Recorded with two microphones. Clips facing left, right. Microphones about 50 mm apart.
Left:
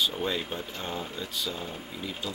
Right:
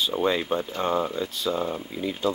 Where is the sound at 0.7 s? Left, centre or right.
Right.